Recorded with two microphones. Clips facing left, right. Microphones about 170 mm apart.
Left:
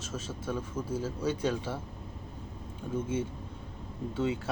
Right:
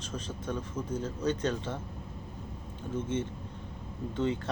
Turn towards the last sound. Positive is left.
turn(degrees=5)  # may be behind; listen again after turning